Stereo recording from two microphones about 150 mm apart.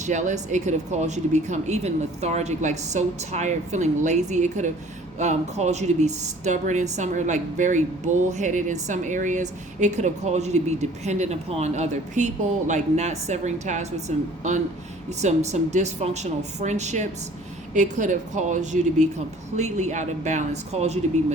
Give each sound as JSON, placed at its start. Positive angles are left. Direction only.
{"t": 0.0, "sound": "speech", "side_deg": -55}